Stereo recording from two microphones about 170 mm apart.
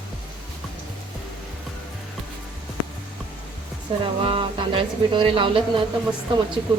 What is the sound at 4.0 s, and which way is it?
Speech, 30° right (ahead or behind).